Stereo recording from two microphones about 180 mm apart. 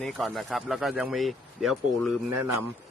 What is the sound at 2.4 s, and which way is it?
Speech, 10° right (ahead or behind).